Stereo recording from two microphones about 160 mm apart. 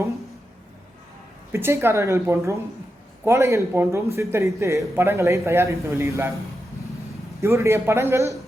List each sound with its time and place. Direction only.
1.5 s a man's voice: 15° right (ahead or behind)
7.4 s a man's voice: 20° right (ahead or behind)